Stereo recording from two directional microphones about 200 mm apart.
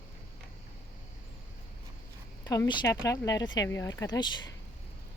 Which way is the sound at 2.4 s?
20° left (ahead or behind).